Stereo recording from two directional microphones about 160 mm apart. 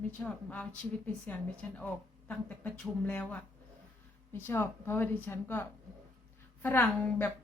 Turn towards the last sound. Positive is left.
turn(degrees=10)  # may be behind; listen again after turning